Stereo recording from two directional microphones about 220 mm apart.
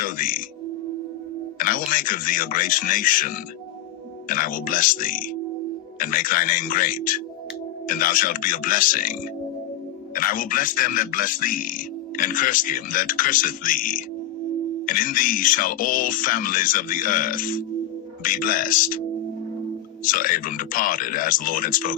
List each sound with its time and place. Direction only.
0.0 s speech: 40° left (ahead or behind)
1.5 s speech: 40° left (ahead or behind)
10.2 s speech: 40° left (ahead or behind)
20.1 s speech: 40° left (ahead or behind)